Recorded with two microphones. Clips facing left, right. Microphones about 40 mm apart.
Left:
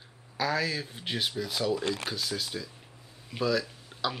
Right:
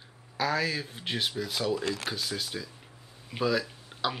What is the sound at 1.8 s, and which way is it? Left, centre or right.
Speech, left.